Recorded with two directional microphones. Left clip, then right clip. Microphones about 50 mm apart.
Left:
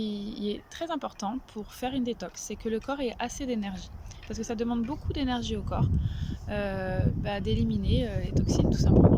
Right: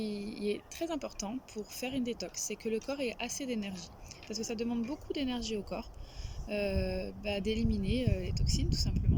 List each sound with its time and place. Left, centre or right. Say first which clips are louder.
0.0 s speech: left 2 dB; right